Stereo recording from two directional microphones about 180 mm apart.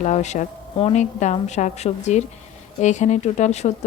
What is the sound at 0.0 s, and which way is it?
A woman's voice, 40° left (ahead or behind).